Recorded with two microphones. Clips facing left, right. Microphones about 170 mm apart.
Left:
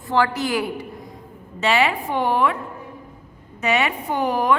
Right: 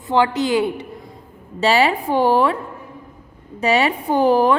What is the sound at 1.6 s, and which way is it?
A woman's voice, 35° right (ahead or behind).